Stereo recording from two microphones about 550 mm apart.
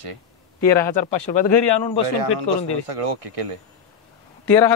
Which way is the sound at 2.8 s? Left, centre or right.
Right.